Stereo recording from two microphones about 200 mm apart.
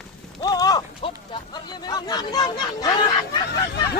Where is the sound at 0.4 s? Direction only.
20° left (ahead or behind).